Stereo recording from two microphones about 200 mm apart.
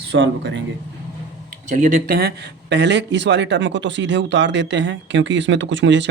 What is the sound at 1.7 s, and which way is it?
Speech, 40° right (ahead or behind).